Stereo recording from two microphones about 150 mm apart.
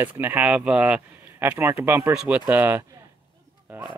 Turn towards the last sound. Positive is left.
turn(degrees=-10)  # may be behind; listen again after turning